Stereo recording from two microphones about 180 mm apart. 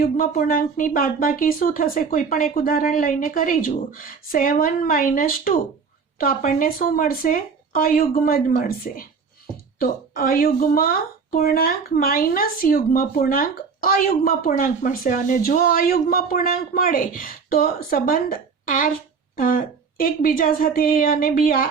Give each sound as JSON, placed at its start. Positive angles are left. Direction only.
{"t": 0.0, "sound": "a woman's voice", "side_deg": 50}